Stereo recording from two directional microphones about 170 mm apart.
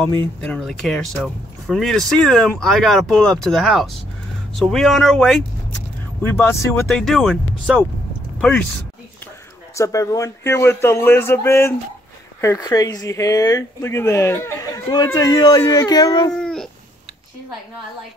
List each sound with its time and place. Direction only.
0.0 s speech: 10° left (ahead or behind)
6.2 s speech: 15° left (ahead or behind)
6.9 s speech: 5° left (ahead or behind)
9.8 s speech: 20° left (ahead or behind)
16.3 s a sound: 5° left (ahead or behind)